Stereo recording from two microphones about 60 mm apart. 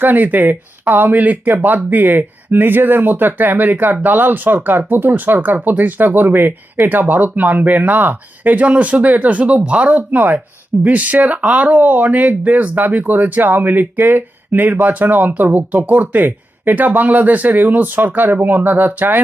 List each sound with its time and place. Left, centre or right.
0.0 s speech: right